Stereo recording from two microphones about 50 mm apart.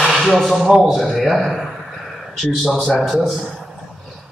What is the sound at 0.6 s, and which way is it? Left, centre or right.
Speech, centre.